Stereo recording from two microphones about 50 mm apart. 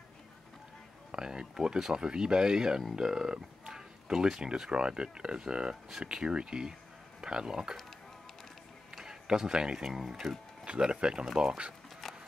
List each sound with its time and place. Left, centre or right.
1.1 s speech: centre
8.9 s a sound: centre
9.8 s speech: centre
10.6 s speech: centre